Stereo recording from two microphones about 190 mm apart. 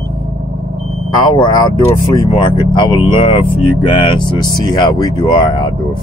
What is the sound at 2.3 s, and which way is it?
Speech, 25° left (ahead or behind).